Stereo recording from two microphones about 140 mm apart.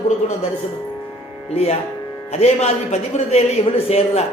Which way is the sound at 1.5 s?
45° left (ahead or behind).